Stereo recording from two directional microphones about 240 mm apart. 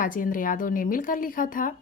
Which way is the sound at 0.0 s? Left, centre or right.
Left.